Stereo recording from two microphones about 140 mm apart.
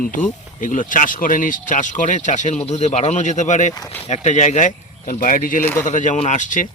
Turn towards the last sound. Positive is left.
turn(degrees=65)  # may be behind; listen again after turning